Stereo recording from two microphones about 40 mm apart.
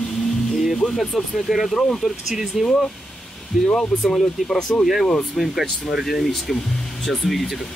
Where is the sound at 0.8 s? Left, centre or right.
Centre.